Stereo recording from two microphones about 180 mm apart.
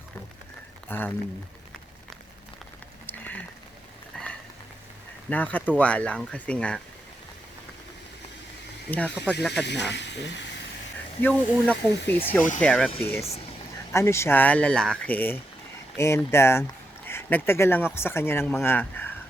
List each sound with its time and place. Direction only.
0.9 s speech: 10° left (ahead or behind)
3.1 s a sound: 10° left (ahead or behind)
5.3 s speech: 10° left (ahead or behind)
8.9 s speech: 10° left (ahead or behind)
9.5 s speech: 70° left (ahead or behind)
11.2 s speech: 5° left (ahead or behind)
11.9 s speech: 70° left (ahead or behind)
12.5 s speech: 5° left (ahead or behind)